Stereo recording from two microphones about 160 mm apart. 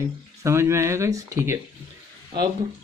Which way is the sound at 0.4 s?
15° right (ahead or behind).